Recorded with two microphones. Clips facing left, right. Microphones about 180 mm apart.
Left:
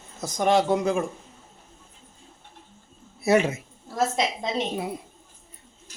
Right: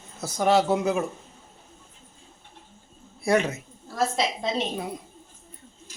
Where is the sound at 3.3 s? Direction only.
10° left (ahead or behind).